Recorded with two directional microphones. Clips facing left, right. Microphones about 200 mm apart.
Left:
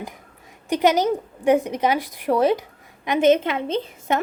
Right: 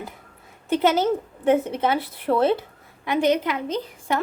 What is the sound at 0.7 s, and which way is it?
A woman's voice, 15° left (ahead or behind).